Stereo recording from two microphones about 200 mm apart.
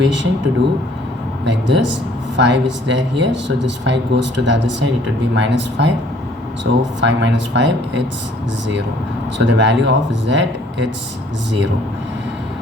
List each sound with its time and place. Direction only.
0.0 s speech: 65° right (ahead or behind)
1.5 s speech: 65° right (ahead or behind)
9.5 s speech: 65° right (ahead or behind)